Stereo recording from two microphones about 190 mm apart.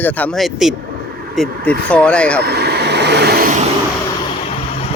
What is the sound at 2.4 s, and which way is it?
Vehicle, 60° right (ahead or behind).